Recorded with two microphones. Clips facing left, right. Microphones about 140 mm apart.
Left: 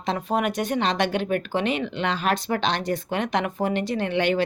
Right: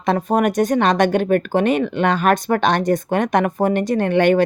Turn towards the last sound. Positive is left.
turn(degrees=-50)  # may be behind; listen again after turning